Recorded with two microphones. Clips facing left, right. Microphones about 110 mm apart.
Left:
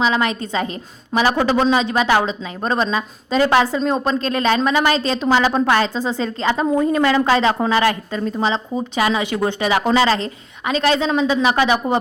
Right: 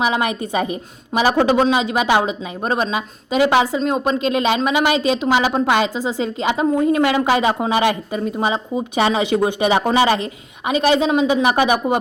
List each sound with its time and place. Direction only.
0.0 s speech: 15° right (ahead or behind)
9.0 s a woman's voice: 25° right (ahead or behind)